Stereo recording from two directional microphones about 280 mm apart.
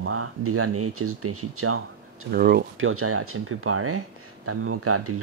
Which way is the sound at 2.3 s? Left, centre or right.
Right.